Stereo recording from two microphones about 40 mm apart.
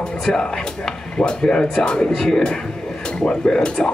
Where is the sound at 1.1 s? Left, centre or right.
Left.